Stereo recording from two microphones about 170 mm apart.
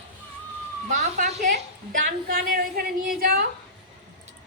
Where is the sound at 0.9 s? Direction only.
45° right (ahead or behind).